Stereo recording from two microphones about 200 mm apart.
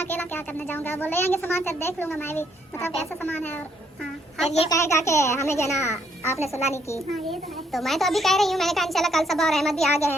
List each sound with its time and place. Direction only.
0.0 s speech: 10° left (ahead or behind)
4.4 s a child's voice: 30° left (ahead or behind)
4.7 s speech: 15° left (ahead or behind)
7.3 s a child's voice: centre (ahead or behind)